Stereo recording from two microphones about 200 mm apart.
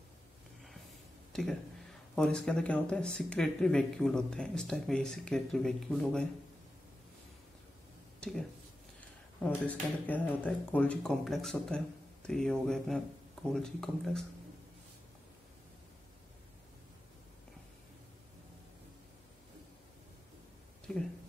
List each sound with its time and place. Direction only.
1.3 s speech: centre (ahead or behind)
8.2 s speech: 5° left (ahead or behind)
9.7 s speech: 10° left (ahead or behind)